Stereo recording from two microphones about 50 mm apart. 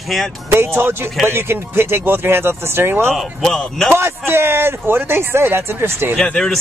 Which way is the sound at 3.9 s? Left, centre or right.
Right.